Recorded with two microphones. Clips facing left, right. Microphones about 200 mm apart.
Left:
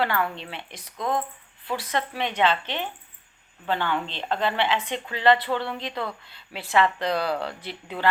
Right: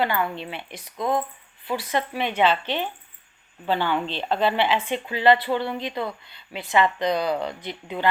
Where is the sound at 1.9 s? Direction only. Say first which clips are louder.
Right 2 dB; 5° right (ahead or behind).